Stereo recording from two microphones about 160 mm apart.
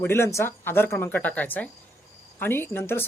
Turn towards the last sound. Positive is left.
turn(degrees=15)  # may be behind; listen again after turning